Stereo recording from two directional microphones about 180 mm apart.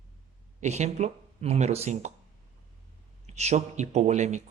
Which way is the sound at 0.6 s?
40° right (ahead or behind).